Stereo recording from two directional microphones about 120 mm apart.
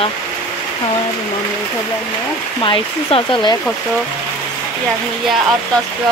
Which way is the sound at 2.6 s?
45° left (ahead or behind).